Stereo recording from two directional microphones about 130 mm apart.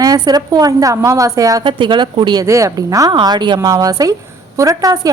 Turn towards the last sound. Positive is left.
turn(degrees=-25)  # may be behind; listen again after turning